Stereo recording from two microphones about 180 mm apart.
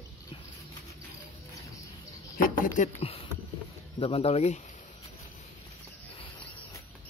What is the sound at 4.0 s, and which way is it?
Speech, 35° left (ahead or behind).